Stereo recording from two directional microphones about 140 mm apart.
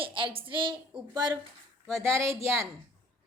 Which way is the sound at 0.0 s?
40° right (ahead or behind).